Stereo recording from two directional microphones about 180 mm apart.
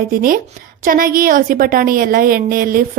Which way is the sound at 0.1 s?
55° right (ahead or behind).